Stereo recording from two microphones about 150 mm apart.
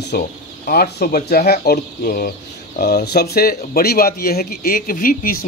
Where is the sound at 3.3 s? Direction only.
90° left.